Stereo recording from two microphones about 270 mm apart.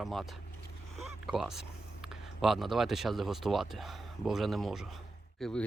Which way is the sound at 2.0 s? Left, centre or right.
Centre.